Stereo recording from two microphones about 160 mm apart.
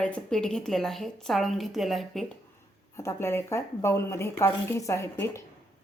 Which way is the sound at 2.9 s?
15° left (ahead or behind).